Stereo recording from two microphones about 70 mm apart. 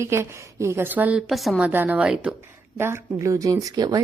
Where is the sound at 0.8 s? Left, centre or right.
Right.